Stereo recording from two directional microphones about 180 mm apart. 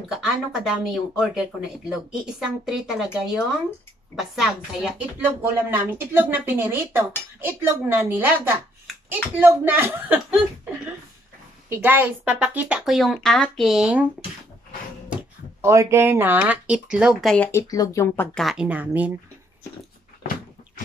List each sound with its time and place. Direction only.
0.1 s speech: 5° right (ahead or behind)
4.2 s speech: centre (ahead or behind)
11.7 s speech: 10° right (ahead or behind)
15.6 s speech: 15° right (ahead or behind); by 17.5 s centre (ahead or behind)
17.5 s speech: 15° left (ahead or behind)
18.4 s speech: 5° right (ahead or behind)